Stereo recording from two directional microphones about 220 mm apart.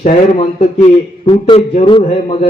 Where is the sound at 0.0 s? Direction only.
30° left (ahead or behind).